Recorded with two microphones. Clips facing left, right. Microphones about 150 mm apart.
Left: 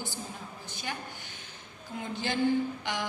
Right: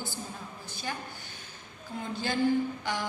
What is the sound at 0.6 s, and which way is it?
Speech, 15° left (ahead or behind).